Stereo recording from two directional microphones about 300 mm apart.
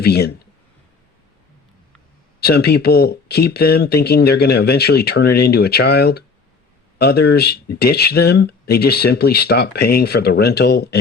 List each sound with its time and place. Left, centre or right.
0.0 s speech: left
2.4 s speech: left